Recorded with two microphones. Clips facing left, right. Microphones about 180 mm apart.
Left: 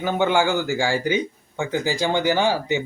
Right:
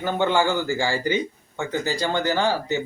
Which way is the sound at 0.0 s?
15° left (ahead or behind).